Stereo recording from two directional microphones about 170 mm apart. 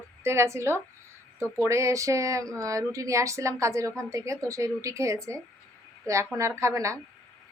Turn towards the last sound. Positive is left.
turn(degrees=-20)  # may be behind; listen again after turning